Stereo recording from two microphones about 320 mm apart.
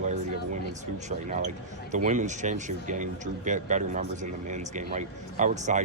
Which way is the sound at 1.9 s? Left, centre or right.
Right.